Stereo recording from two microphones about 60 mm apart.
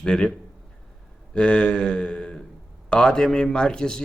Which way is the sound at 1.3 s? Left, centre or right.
Centre.